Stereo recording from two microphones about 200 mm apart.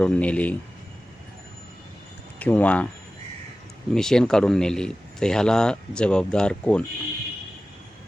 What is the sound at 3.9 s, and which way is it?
A man's voice, 5° left (ahead or behind).